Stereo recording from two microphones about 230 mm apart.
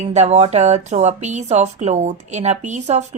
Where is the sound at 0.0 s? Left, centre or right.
Right.